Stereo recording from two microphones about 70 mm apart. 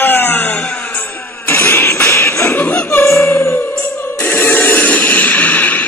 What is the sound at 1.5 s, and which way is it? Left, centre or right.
Music, left.